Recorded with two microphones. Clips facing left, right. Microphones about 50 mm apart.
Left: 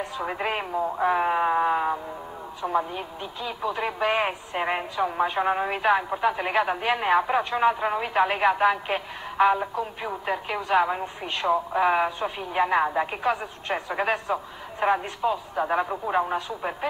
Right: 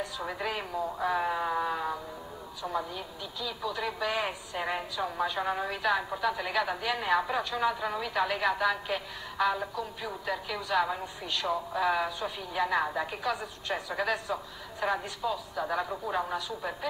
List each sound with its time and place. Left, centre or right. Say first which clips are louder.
0.0 s speech: left 5 dB; left